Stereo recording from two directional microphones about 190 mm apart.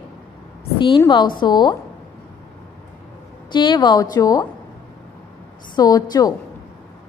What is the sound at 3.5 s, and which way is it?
Speech, 25° left (ahead or behind).